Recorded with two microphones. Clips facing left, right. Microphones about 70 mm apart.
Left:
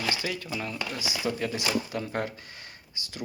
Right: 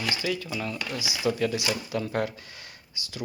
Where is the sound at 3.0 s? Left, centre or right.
Left.